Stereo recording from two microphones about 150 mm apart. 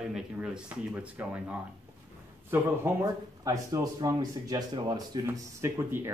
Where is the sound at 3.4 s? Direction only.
25° right (ahead or behind).